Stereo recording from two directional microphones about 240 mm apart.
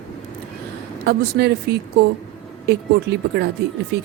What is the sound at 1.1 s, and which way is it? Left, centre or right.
Speech, right.